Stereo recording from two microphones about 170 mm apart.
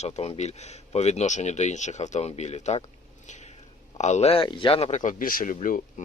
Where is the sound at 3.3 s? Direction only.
40° left (ahead or behind).